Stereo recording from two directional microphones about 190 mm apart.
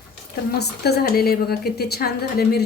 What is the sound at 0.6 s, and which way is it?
A woman's voice, 60° left (ahead or behind).